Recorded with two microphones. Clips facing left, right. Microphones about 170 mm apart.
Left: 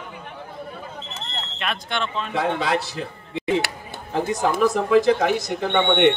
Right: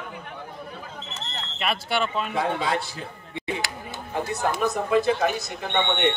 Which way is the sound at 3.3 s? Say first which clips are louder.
Left 8 dB; 80° left.